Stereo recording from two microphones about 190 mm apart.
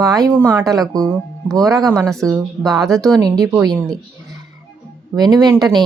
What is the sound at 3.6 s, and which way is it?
Speech, 20° right (ahead or behind).